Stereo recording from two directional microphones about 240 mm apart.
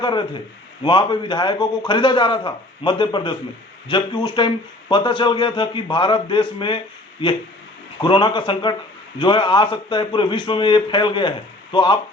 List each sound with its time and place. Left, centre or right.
0.0 s a man's voice: centre